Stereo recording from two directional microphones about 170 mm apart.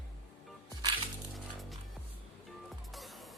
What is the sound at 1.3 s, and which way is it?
Music, centre (ahead or behind).